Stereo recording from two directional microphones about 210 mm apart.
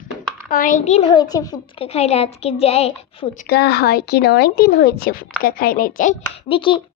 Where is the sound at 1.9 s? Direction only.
30° left (ahead or behind).